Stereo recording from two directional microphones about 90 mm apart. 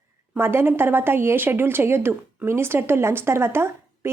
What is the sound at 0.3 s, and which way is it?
A woman's voice, 25° right (ahead or behind).